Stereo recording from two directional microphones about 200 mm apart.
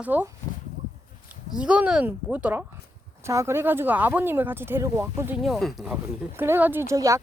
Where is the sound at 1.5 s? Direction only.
5° right (ahead or behind).